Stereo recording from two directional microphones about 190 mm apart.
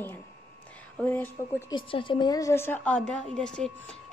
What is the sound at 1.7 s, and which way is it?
A woman's voice, 25° left (ahead or behind).